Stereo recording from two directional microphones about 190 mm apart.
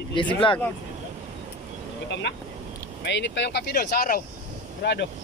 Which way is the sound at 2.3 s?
70° left (ahead or behind).